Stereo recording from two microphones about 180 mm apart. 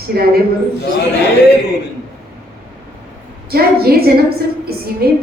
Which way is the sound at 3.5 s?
60° right (ahead or behind).